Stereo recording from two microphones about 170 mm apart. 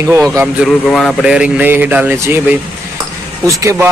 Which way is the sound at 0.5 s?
Centre (ahead or behind).